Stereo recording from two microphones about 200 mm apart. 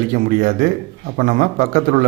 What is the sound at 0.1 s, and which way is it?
A man's voice, 45° right (ahead or behind).